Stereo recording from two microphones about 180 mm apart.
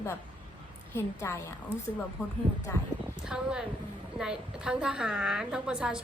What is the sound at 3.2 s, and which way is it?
A woman's voice, 5° right (ahead or behind).